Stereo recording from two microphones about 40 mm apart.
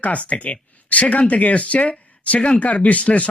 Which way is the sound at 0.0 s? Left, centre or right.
Left.